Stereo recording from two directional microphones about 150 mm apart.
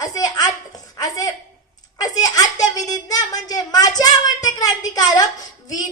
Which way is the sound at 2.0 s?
25° left (ahead or behind).